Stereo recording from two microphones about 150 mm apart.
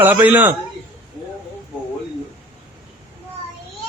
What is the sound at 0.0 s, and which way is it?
Speech, 10° right (ahead or behind).